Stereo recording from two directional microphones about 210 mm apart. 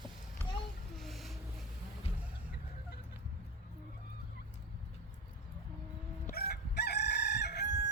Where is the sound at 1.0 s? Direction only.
Centre (ahead or behind).